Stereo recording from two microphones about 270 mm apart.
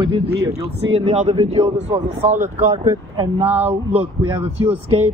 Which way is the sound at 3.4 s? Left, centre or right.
Centre.